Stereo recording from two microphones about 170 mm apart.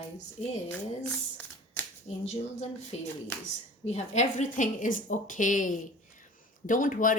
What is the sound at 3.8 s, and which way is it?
Speech, 40° left (ahead or behind).